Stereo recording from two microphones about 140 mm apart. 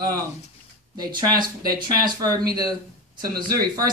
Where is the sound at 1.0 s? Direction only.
30° right (ahead or behind).